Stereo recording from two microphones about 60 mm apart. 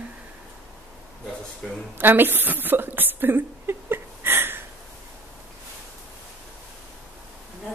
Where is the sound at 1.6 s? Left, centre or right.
Centre.